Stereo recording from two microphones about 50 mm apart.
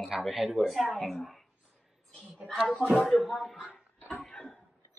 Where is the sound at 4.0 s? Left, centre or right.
Left.